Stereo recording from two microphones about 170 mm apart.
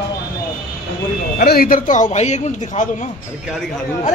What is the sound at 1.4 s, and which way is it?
A man's voice, 60° left (ahead or behind).